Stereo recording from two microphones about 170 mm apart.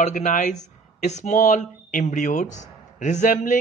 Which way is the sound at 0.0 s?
50° left (ahead or behind).